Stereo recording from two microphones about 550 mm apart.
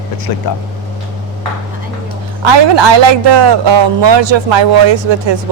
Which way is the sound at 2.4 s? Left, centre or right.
Right.